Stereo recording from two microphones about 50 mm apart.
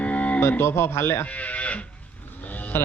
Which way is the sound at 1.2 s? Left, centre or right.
Left.